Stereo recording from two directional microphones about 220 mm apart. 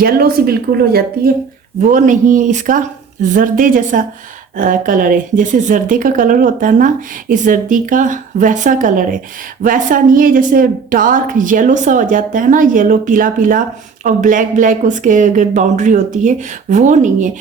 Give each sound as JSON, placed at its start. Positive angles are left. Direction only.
{"t": 0.0, "sound": "a woman's voice", "side_deg": -45}